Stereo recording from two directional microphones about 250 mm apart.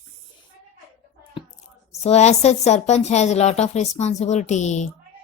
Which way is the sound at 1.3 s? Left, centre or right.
Centre.